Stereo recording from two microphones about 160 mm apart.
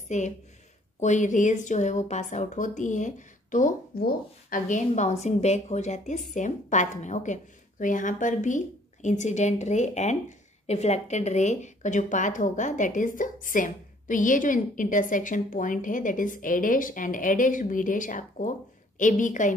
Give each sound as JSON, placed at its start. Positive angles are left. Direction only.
{"t": 0.1, "sound": "a woman's voice", "side_deg": 45}